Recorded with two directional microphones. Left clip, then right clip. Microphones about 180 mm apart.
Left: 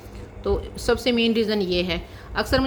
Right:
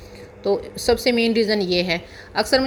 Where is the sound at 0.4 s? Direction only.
15° right (ahead or behind).